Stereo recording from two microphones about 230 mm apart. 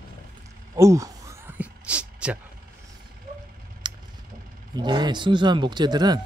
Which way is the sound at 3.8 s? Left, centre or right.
Centre.